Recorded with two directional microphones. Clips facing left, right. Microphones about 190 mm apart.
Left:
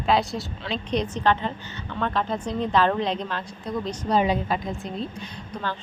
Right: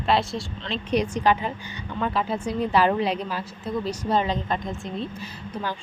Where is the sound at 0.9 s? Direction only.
10° right (ahead or behind).